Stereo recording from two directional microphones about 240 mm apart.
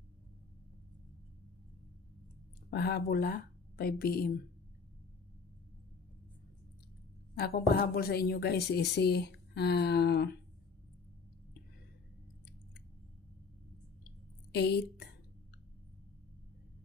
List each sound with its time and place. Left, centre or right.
2.7 s speech: left
7.3 s a woman's voice: left
14.5 s a woman's voice: left